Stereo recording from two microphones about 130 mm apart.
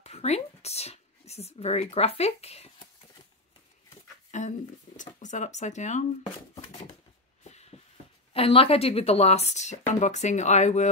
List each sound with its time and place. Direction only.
0.0 s speech: 55° left (ahead or behind)
4.3 s speech: 65° left (ahead or behind)
6.5 s a sound: 50° left (ahead or behind)
8.3 s speech: 45° left (ahead or behind); by 10.9 s 60° left (ahead or behind)